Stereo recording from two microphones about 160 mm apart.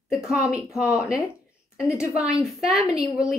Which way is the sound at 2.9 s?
20° left (ahead or behind).